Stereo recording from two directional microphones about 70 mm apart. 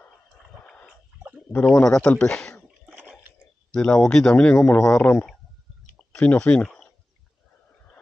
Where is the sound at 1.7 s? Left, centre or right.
Centre.